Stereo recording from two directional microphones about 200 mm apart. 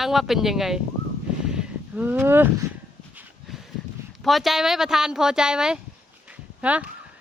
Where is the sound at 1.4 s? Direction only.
5° right (ahead or behind).